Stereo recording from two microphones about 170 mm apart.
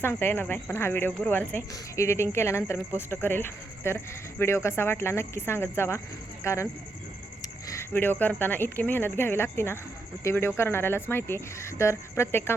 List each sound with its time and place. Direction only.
0.0 s speech: 10° left (ahead or behind)